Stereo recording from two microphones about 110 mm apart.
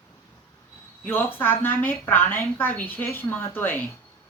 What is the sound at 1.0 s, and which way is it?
Speech, 20° left (ahead or behind).